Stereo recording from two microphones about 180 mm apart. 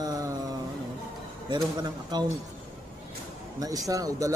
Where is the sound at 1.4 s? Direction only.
25° right (ahead or behind).